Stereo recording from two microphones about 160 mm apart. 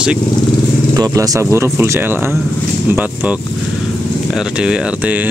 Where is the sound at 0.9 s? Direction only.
20° right (ahead or behind).